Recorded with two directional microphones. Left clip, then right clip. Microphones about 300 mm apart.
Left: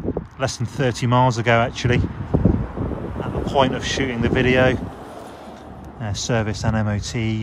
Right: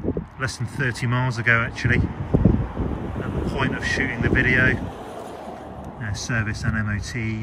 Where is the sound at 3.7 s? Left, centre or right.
Centre.